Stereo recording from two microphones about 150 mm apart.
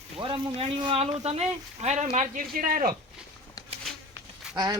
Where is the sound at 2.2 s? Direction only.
60° right (ahead or behind).